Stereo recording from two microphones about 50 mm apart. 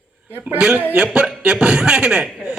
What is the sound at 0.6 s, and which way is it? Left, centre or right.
A man's voice, right.